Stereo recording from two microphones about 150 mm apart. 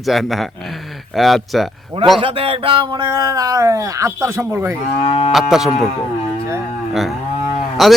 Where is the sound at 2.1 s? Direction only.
40° right (ahead or behind); by 4.7 s 15° right (ahead or behind).